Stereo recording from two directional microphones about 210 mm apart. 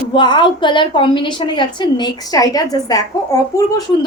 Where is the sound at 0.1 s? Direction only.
20° left (ahead or behind).